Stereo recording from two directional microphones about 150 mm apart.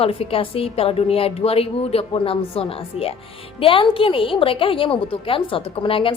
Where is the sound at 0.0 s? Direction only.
40° left (ahead or behind).